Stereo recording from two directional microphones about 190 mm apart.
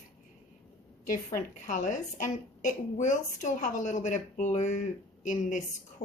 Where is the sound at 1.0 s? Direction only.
45° left (ahead or behind).